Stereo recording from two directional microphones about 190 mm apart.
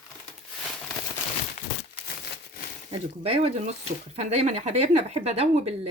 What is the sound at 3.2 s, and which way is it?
Speech, 35° right (ahead or behind).